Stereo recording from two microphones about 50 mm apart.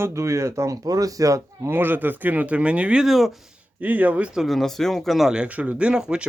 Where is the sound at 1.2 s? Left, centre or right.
Right.